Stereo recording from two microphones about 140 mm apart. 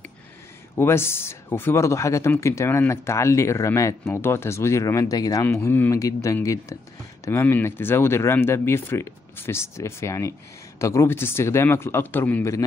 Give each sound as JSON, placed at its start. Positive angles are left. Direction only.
{"t": 0.7, "sound": "speech", "side_deg": 15}